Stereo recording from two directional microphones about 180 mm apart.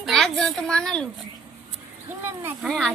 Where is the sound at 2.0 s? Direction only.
15° right (ahead or behind).